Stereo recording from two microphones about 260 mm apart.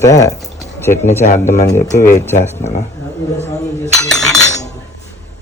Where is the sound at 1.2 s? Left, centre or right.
Left.